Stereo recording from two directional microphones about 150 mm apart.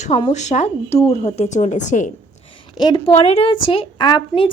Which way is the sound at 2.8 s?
30° left (ahead or behind).